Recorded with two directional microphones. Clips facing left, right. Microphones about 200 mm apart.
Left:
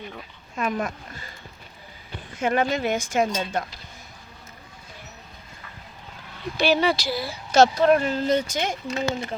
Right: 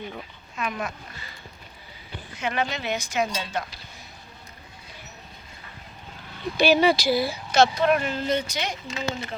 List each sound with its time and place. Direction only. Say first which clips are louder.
0.5 s speech: left 4 dB; 50° left (ahead or behind)
2.3 s speech: left 5 dB; 50° left (ahead or behind)
6.6 s speech: right 2 dB; 10° right (ahead or behind)
7.5 s speech: left 3 dB; 40° left (ahead or behind)